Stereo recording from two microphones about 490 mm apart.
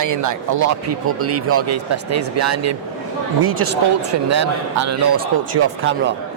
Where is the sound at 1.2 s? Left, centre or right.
Right.